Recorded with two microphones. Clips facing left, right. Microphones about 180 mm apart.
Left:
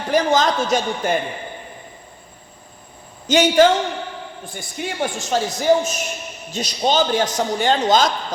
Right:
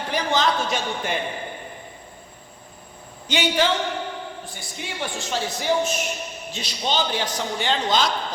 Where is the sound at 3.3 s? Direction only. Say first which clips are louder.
Left 8 dB; 45° left (ahead or behind).